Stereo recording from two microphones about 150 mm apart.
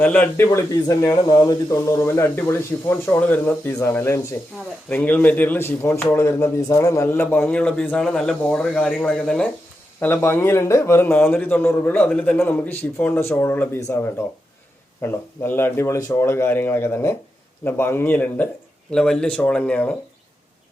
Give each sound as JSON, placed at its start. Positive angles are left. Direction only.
{"t": 0.0, "sound": "a man's voice", "side_deg": 10}
{"t": 10.0, "sound": "a man's voice", "side_deg": 15}